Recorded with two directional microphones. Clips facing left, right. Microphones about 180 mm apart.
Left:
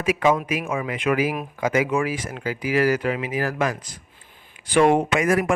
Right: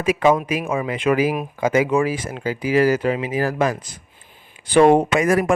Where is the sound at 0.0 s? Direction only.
30° right (ahead or behind).